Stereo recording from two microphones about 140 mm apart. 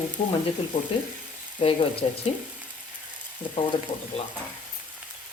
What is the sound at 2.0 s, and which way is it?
Speech, 50° left (ahead or behind).